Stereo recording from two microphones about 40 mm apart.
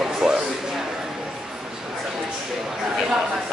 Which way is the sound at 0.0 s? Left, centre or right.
Centre.